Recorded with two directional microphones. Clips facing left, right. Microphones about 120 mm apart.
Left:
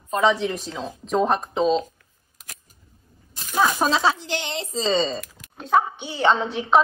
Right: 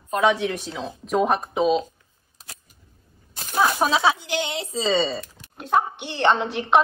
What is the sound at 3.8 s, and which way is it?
A woman's voice, 10° right (ahead or behind).